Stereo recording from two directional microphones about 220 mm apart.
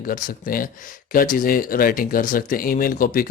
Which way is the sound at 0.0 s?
40° left (ahead or behind).